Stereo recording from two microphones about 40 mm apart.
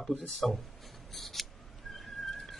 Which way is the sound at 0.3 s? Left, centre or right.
Centre.